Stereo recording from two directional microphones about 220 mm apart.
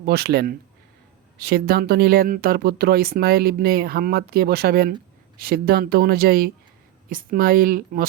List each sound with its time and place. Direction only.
0.0 s speech: 45° right (ahead or behind)